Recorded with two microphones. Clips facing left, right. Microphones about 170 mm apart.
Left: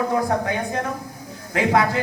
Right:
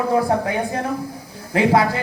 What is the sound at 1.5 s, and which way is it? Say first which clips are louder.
Speech: right 3 dB; 30° right (ahead or behind).